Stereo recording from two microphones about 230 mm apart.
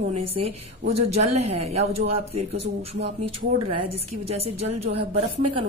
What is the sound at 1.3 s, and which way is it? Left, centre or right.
Speech, right.